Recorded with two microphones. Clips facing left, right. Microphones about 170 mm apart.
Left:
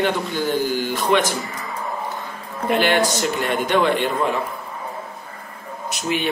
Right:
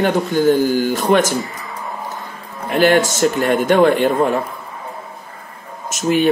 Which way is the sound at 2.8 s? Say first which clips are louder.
Right 8 dB; 45° right (ahead or behind).